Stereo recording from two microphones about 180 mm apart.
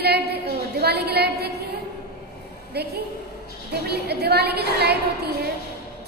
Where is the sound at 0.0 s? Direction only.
60° right (ahead or behind).